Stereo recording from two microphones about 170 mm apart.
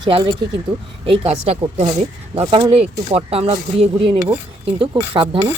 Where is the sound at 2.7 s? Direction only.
35° right (ahead or behind).